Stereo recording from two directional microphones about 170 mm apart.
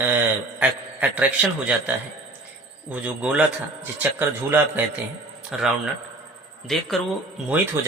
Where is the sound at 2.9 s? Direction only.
10° right (ahead or behind).